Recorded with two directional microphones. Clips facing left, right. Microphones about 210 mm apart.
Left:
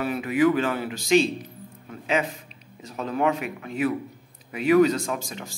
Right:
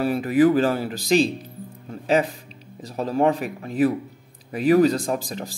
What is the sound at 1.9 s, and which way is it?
Music, 35° right (ahead or behind).